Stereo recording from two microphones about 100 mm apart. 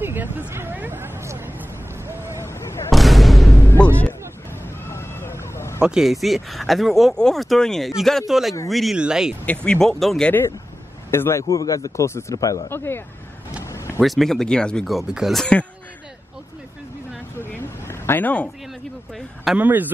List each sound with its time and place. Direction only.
0.0 s vehicle: 20° right (ahead or behind)
2.0 s a sound: 25° right (ahead or behind)
2.4 s artillery fire: 25° left (ahead or behind)
2.9 s artillery fire: centre (ahead or behind)
3.6 s music: 15° left (ahead or behind)
4.8 s vehicle: 25° left (ahead or behind)
5.8 s speech: 5° right (ahead or behind)
9.7 s speech: 5° left (ahead or behind)
11.1 s a man's voice: 25° left (ahead or behind)
12.6 s speech: 25° left (ahead or behind)
14.0 s speech: centre (ahead or behind)
17.4 s vehicle: 25° left (ahead or behind)
19.5 s speech: 15° right (ahead or behind)